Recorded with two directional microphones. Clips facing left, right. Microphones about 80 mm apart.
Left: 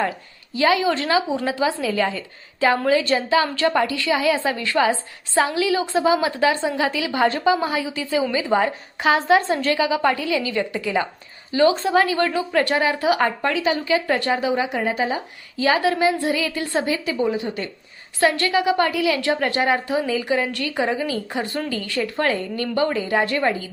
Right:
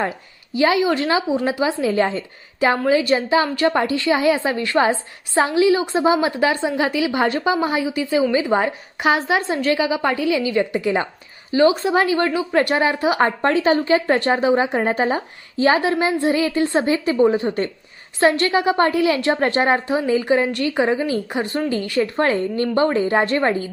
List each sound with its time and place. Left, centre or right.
0.5 s a woman's voice: right
2.9 s a woman's voice: centre
9.2 s a woman's voice: centre
9.9 s a woman's voice: right
18.2 s a woman's voice: right